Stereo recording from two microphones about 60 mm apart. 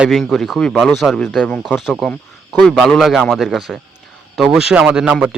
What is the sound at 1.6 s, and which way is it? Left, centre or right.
A man's voice, centre.